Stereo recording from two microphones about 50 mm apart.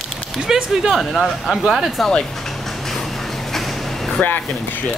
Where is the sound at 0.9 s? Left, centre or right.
Centre.